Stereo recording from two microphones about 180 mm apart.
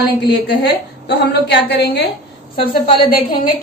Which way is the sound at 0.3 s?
70° left (ahead or behind).